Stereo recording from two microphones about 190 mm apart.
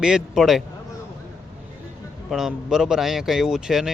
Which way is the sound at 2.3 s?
5° right (ahead or behind).